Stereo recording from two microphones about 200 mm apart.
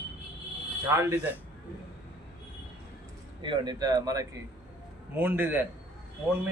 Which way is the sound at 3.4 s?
25° right (ahead or behind).